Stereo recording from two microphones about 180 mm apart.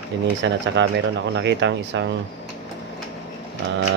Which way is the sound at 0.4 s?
90° right.